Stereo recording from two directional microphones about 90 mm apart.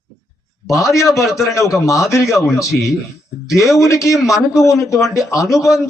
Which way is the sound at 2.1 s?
Centre (ahead or behind).